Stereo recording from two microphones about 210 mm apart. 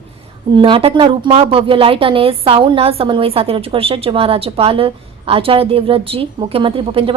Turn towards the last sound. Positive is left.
turn(degrees=-25)  # may be behind; listen again after turning